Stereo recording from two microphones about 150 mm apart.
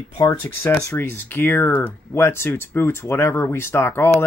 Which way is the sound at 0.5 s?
15° left (ahead or behind).